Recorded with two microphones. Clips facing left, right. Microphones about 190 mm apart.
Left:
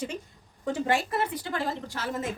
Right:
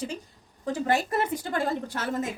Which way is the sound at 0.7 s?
45° right (ahead or behind).